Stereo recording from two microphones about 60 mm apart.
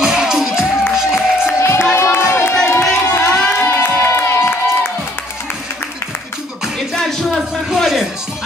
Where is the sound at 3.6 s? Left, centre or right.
Left.